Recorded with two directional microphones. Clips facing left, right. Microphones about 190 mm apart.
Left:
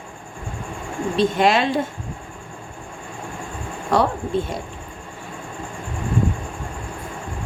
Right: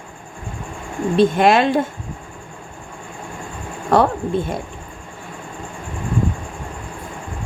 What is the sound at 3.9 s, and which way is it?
Speech, 50° right (ahead or behind).